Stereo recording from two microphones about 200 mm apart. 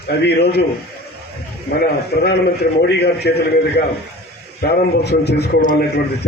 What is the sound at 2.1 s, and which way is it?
A man's voice, 50° left (ahead or behind).